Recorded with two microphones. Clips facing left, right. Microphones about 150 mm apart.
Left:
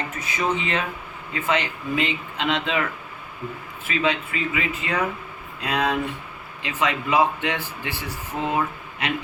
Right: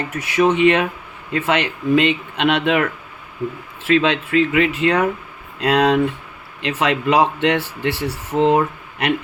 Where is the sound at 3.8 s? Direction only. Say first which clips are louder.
Right 7 dB; 80° right.